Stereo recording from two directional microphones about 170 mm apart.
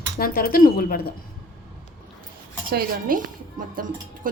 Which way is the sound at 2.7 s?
55° right (ahead or behind).